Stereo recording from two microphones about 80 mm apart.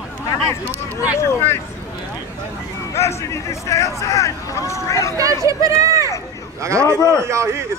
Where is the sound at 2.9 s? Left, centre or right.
Left.